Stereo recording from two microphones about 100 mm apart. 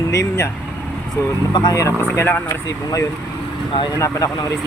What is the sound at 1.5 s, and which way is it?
Speech, 45° left (ahead or behind).